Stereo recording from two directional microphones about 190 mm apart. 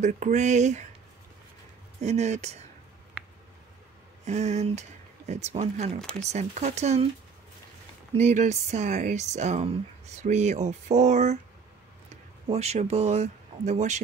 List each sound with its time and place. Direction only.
0.0 s speech: 40° right (ahead or behind)
2.0 s speech: 35° right (ahead or behind)
4.2 s speech: 35° right (ahead or behind)
5.9 s speech: 5° left (ahead or behind)
6.2 s speech: 35° right (ahead or behind)
8.1 s speech: 35° right (ahead or behind)
12.4 s speech: 35° right (ahead or behind)